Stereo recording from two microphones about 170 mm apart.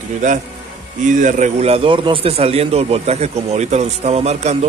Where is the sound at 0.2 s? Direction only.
50° right (ahead or behind).